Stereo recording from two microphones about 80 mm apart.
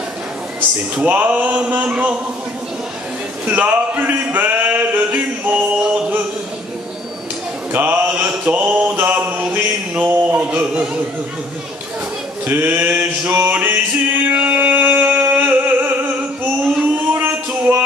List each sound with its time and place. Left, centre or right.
1.0 s a sound: right
3.4 s a sound: right
4.2 s music: right
5.8 s music: centre
7.7 s mantra: right
8.6 s music: centre
12.4 s a sound: right
13.3 s male singing: right
17.1 s music: right